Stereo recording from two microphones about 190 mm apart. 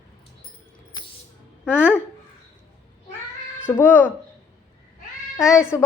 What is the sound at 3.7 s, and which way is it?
Speech, 10° left (ahead or behind).